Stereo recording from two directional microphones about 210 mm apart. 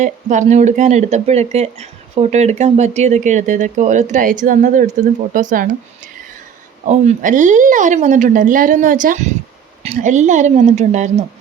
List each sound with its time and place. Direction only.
0.0 s speech: 35° right (ahead or behind)
6.8 s speech: 35° right (ahead or behind)